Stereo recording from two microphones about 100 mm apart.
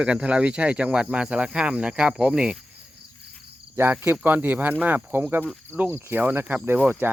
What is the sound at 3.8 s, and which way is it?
Speech, 20° right (ahead or behind).